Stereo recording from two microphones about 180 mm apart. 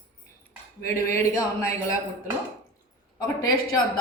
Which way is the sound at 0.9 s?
15° left (ahead or behind).